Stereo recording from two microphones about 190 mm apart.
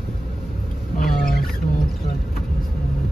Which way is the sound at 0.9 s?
50° left (ahead or behind).